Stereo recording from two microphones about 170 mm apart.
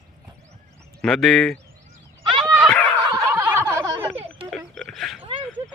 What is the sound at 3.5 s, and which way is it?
Snicker, 15° right (ahead or behind).